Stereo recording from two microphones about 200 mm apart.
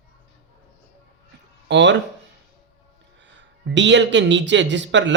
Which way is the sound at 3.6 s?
65° right (ahead or behind).